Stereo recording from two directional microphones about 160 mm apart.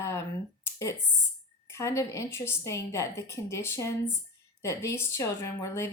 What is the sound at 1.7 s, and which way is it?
Speech, 15° left (ahead or behind).